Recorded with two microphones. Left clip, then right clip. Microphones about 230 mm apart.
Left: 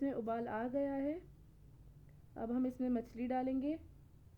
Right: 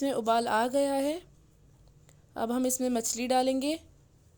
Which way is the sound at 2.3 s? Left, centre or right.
Right.